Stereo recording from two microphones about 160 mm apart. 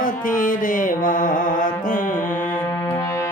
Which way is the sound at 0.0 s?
55° left (ahead or behind).